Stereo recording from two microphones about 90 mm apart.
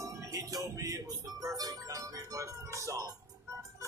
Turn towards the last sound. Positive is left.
turn(degrees=-35)  # may be behind; listen again after turning